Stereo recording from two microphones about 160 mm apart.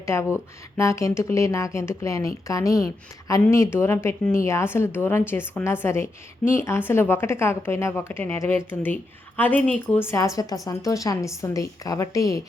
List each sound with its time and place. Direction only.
0.0 s a woman's voice: 15° left (ahead or behind)